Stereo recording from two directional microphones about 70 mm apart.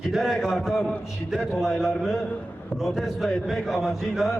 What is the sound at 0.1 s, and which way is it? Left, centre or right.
A man's voice, centre.